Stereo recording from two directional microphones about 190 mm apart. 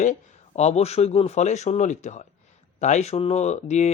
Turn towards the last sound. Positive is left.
turn(degrees=35)  # may be behind; listen again after turning